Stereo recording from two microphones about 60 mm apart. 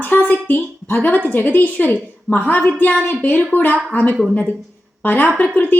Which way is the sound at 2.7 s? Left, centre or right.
Left.